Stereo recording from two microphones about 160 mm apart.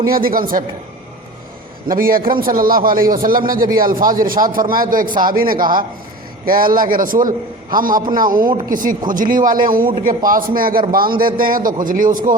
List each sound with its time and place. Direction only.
0.1 s a man's voice: 65° right (ahead or behind)
1.9 s a man's voice: 65° right (ahead or behind)